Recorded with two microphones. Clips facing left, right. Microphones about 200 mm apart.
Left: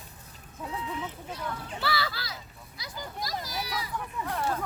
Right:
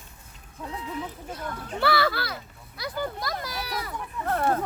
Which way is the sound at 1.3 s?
50° right (ahead or behind).